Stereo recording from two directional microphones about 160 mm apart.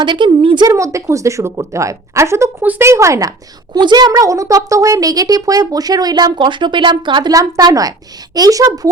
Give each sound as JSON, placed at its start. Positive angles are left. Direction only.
{"t": 0.0, "sound": "speech", "side_deg": -30}